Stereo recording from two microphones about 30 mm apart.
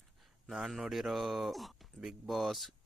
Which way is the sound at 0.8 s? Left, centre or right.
Centre.